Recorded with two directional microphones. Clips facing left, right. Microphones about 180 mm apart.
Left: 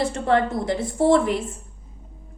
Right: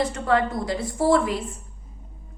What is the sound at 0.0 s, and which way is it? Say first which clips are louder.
A woman's voice: left 1 dB; 25° left (ahead or behind).